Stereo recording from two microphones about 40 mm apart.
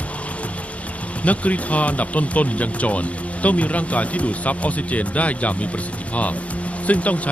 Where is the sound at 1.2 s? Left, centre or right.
Left.